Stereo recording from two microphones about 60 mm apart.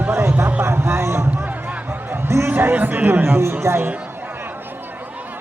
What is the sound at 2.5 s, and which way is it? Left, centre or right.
Speech, right.